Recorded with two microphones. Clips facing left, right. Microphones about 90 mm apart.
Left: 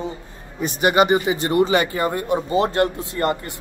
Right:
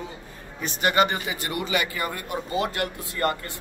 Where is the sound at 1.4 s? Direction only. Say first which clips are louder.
Left 9 dB; 35° left (ahead or behind).